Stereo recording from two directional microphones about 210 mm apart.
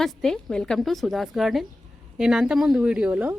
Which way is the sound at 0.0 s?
Centre (ahead or behind).